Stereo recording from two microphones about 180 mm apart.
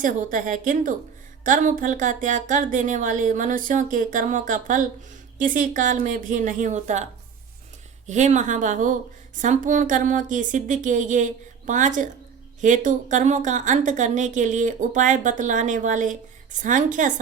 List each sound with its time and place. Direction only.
0.0 s a woman's voice: 45° right (ahead or behind)